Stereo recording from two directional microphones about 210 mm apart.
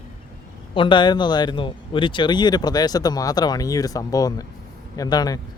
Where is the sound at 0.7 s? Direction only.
25° left (ahead or behind).